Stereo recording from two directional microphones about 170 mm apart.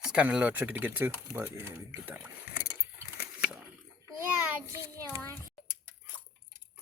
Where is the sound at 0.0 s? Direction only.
5° right (ahead or behind).